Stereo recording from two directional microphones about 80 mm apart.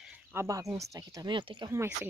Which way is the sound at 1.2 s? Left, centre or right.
Right.